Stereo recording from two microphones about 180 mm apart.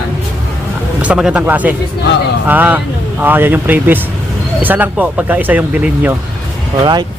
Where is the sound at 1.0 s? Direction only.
5° right (ahead or behind).